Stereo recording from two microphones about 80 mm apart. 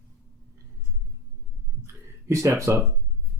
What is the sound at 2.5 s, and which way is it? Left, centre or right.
Speech, right.